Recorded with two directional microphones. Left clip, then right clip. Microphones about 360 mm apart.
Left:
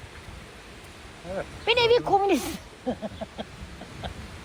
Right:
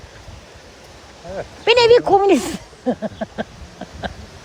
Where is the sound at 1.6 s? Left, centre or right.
Right.